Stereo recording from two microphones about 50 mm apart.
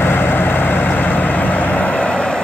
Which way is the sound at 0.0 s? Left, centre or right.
Left.